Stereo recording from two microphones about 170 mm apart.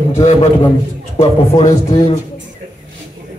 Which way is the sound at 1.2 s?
40° left (ahead or behind).